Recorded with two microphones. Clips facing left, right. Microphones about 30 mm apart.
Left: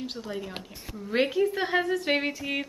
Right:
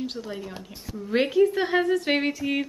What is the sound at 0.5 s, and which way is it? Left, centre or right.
Speech, left.